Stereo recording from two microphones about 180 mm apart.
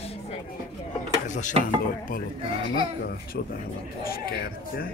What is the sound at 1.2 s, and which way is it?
Speech, 45° left (ahead or behind).